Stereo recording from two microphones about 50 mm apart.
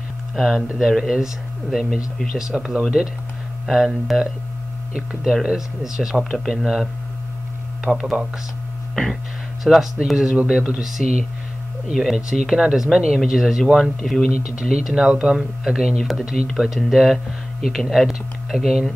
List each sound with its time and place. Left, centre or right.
0.7 s speech: centre
9.6 s speech: centre
10.3 s speech: centre
10.8 s speech: centre
13.7 s speech: centre
14.6 s speech: centre